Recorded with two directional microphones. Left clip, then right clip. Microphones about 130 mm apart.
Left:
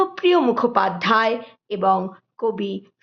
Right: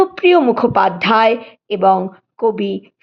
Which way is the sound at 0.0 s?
30° right (ahead or behind).